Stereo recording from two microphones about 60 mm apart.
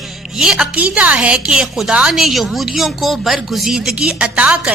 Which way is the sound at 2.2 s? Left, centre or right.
Centre.